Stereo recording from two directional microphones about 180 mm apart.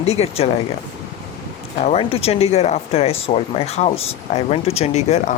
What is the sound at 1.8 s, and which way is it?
Speech, 35° left (ahead or behind).